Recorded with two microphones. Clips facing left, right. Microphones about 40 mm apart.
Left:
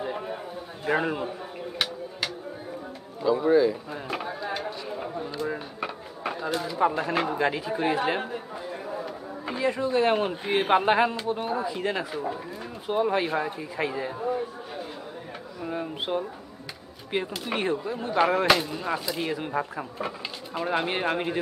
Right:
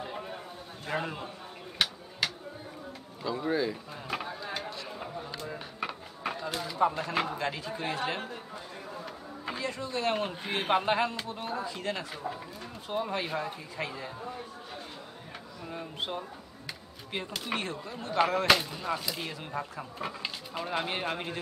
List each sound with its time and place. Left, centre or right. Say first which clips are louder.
0.0 s a sound: left 7 dB; centre
0.8 s speech: left 8 dB; centre
1.8 s tick-tock: even; centre
3.2 s a sound: left 10 dB; centre
6.5 s speech: left 4 dB; centre
8.8 s a sound: left 7 dB; centre
9.7 s speech: left 9 dB; centre
15.6 s speech: left 6 dB; centre
20.0 s speech: even; centre